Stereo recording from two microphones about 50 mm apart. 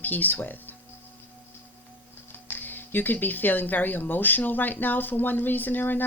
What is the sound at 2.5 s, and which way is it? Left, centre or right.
Speech, left.